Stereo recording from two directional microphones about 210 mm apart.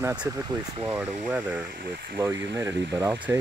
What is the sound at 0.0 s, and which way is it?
Speech, 5° right (ahead or behind).